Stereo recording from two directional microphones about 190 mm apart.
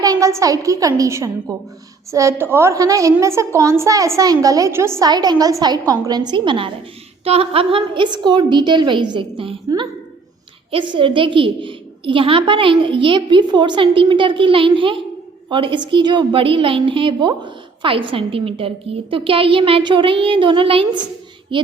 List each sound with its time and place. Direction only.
0.0 s a woman's voice: 20° right (ahead or behind)